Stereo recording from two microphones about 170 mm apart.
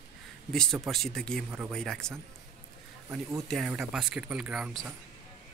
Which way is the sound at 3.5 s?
5° right (ahead or behind).